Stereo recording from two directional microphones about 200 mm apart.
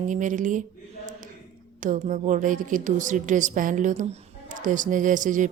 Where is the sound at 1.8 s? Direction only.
40° right (ahead or behind).